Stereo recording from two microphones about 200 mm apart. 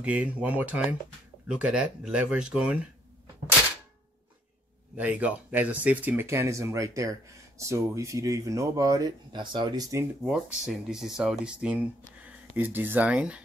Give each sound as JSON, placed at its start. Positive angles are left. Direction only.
{"t": 0.0, "sound": "speech", "side_deg": -5}
{"t": 4.9, "sound": "speech", "side_deg": -5}
{"t": 10.2, "sound": "speech", "side_deg": -5}